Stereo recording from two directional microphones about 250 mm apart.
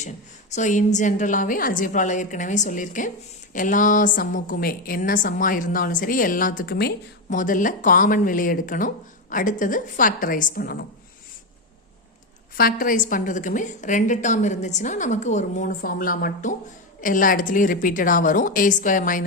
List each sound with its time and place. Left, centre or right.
0.5 s a woman's voice: left
12.8 s a woman's voice: left